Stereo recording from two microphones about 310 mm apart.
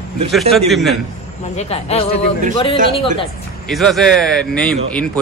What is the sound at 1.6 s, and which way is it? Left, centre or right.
Speech, centre.